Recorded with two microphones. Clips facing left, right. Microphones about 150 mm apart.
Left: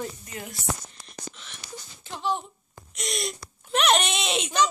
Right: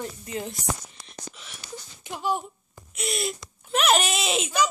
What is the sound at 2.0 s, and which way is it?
Speech, 10° right (ahead or behind).